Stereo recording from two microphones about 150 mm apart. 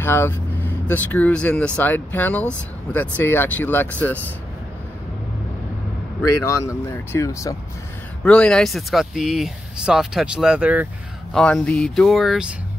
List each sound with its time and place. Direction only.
0.0 s speech: 15° left (ahead or behind)
6.4 s speech: 20° left (ahead or behind)
8.2 s speech: 5° left (ahead or behind); by 10.9 s 10° right (ahead or behind)
11.3 s speech: 5° left (ahead or behind)